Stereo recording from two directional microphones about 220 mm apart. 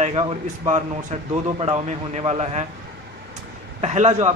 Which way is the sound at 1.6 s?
30° right (ahead or behind).